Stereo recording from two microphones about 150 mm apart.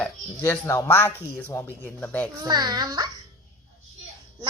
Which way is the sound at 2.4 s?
30° right (ahead or behind).